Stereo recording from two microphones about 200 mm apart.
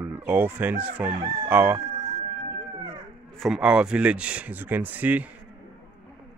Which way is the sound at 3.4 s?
5° right (ahead or behind).